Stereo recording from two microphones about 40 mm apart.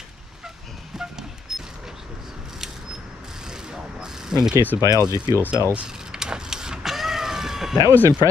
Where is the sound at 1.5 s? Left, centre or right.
Centre.